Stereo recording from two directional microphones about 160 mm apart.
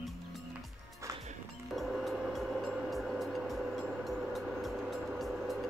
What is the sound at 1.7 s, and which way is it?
Music, centre (ahead or behind).